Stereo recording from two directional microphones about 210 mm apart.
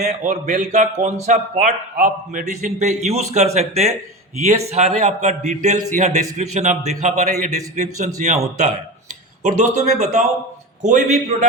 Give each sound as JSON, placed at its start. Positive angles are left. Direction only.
{"t": 0.0, "sound": "a man's voice", "side_deg": -35}